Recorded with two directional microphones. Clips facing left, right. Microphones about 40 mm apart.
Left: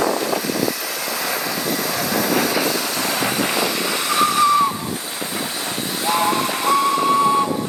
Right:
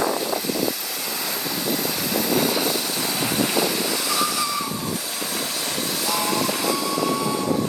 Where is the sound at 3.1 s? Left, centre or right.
Left.